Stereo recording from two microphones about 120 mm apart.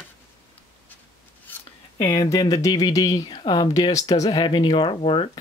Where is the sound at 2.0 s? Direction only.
30° left (ahead or behind); by 5.4 s 50° left (ahead or behind).